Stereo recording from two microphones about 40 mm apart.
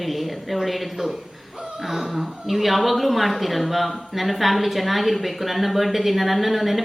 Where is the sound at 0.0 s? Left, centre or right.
Centre.